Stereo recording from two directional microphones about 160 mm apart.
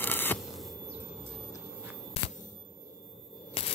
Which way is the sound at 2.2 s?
40° left (ahead or behind).